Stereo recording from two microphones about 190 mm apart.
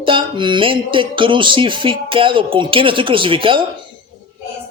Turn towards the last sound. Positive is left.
turn(degrees=-25)  # may be behind; listen again after turning